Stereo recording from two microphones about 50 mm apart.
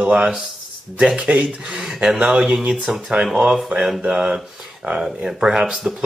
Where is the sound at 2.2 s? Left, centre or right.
Centre.